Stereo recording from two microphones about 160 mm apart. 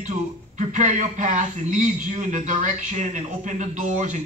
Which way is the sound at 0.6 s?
50° right (ahead or behind).